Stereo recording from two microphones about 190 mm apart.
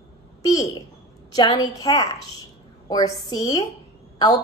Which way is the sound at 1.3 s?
20° left (ahead or behind).